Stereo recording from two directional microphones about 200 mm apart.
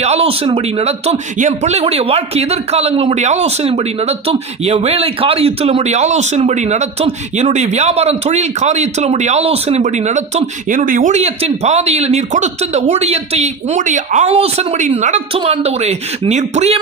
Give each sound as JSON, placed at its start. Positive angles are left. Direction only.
{"t": 0.0, "sound": "speech", "side_deg": -30}